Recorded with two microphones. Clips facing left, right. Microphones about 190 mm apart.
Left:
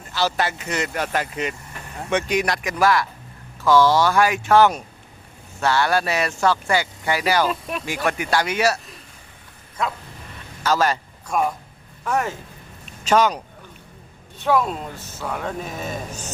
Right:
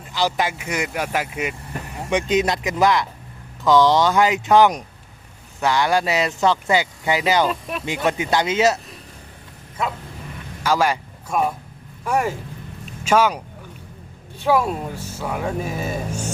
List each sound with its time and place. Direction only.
0.1 s speech: 15° right (ahead or behind)
7.4 s speech: centre (ahead or behind)
7.9 s speech: 20° right (ahead or behind)
10.6 s speech: 10° right (ahead or behind)
14.4 s speech: 10° right (ahead or behind)